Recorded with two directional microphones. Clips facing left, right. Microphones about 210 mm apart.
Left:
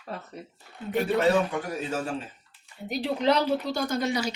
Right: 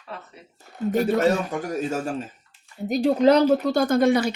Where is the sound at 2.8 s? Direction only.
40° right (ahead or behind).